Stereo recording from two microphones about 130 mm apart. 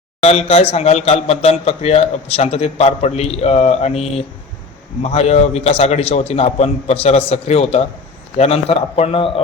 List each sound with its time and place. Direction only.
0.2 s a man's voice: 50° left (ahead or behind)